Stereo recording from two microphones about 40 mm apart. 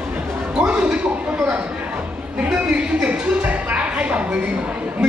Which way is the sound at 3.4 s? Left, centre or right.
Right.